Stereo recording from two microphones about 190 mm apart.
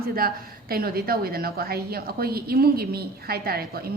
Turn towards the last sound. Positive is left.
turn(degrees=-55)  # may be behind; listen again after turning